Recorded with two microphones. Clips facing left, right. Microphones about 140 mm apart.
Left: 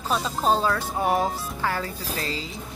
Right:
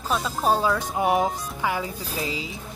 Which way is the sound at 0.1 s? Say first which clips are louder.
Even; 5° right (ahead or behind).